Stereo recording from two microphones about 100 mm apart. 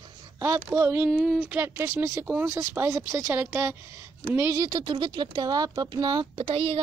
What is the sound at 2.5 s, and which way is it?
A woman's voice, 30° right (ahead or behind).